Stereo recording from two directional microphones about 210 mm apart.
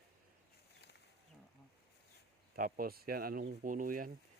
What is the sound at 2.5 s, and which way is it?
Speech, 45° right (ahead or behind).